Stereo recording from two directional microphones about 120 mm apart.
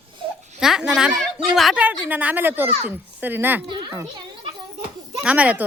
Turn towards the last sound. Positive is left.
turn(degrees=-10)  # may be behind; listen again after turning